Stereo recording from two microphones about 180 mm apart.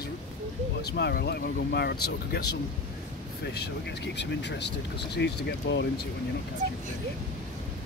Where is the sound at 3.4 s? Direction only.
65° left (ahead or behind).